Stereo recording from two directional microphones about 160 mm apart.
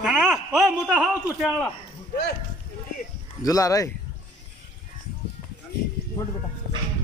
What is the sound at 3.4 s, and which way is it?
Speech, 20° left (ahead or behind).